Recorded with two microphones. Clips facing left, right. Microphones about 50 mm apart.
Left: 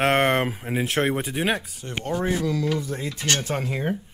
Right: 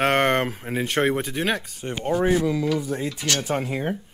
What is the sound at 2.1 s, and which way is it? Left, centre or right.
Speech, centre.